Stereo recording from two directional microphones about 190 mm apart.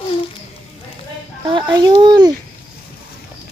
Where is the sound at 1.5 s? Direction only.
25° right (ahead or behind).